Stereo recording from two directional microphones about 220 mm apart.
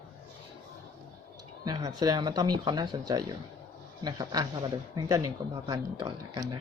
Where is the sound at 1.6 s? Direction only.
15° right (ahead or behind).